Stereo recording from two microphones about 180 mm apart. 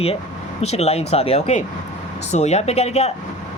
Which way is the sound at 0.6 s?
35° left (ahead or behind).